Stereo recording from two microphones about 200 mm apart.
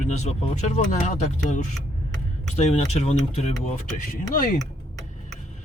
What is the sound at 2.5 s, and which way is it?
Speech, 35° left (ahead or behind).